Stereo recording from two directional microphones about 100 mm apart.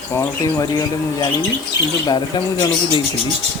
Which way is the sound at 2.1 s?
45° left (ahead or behind).